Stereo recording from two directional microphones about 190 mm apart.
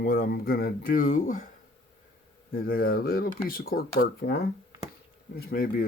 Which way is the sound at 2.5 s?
50° left (ahead or behind).